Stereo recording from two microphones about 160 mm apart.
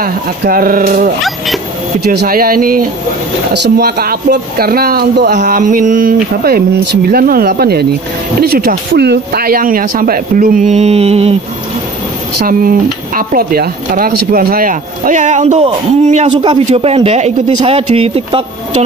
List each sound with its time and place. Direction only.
0.0 s speech: 65° right (ahead or behind)
3.5 s speech: 85° right
5.6 s speech: 55° right (ahead or behind)
12.4 s speech: 60° right (ahead or behind); by 18.9 s 40° right (ahead or behind)